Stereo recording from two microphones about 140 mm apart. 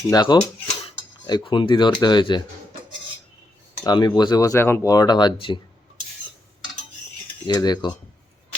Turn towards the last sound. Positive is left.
turn(degrees=30)  # may be behind; listen again after turning